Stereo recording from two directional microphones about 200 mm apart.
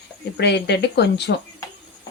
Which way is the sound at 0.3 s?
55° left (ahead or behind).